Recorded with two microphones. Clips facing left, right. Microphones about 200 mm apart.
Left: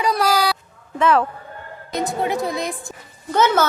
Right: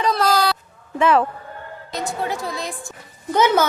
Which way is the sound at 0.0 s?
10° left (ahead or behind).